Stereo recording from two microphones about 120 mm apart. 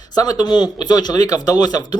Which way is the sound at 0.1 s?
35° left (ahead or behind).